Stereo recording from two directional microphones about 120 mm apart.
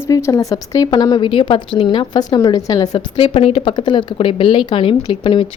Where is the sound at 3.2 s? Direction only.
50° left (ahead or behind).